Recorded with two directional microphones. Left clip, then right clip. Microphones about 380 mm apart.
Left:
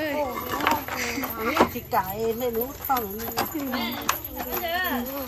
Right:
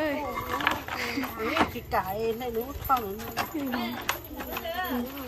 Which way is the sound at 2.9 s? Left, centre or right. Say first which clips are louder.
Even; centre.